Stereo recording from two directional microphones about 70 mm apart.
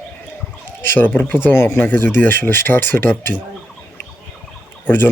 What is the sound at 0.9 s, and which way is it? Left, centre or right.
Speech, left.